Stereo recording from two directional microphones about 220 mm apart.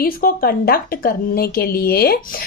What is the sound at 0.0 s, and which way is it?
A woman's voice, 40° left (ahead or behind).